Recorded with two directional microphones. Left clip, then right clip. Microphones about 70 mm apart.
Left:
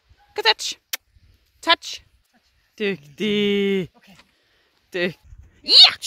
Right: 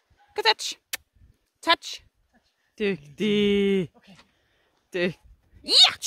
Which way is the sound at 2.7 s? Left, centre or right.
Centre.